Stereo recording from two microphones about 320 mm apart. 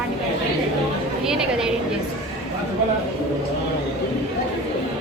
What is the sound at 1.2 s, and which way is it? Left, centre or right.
Speech, centre.